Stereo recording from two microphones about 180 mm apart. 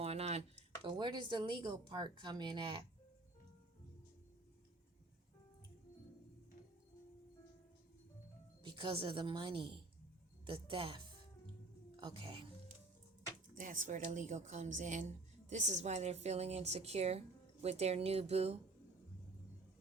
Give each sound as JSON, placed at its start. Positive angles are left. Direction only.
{"t": 0.0, "sound": "a sound", "side_deg": -35}
{"t": 0.9, "sound": "speech", "side_deg": -25}
{"t": 8.6, "sound": "speech", "side_deg": -25}
{"t": 13.6, "sound": "a woman's voice", "side_deg": -45}